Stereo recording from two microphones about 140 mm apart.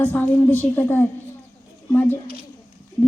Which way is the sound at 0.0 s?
10° left (ahead or behind).